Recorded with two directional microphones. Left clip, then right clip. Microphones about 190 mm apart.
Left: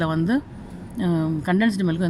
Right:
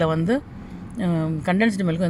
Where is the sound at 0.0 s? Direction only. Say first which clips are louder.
Right 2 dB; 20° right (ahead or behind).